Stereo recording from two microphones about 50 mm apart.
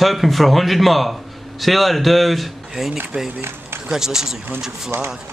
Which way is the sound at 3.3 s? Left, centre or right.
Right.